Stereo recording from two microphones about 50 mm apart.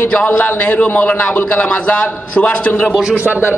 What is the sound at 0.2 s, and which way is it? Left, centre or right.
A man's voice, left.